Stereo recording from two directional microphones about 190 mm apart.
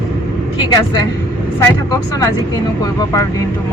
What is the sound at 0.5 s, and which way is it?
Speech, 20° left (ahead or behind).